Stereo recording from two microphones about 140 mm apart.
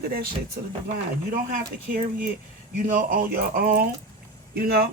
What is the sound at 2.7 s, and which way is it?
Speech, 70° right (ahead or behind).